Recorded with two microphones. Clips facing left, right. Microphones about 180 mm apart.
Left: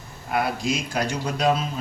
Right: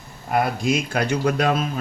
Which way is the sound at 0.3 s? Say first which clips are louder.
Right 3 dB; 50° right (ahead or behind).